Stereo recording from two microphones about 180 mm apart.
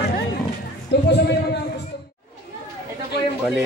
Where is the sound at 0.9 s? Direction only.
70° left (ahead or behind).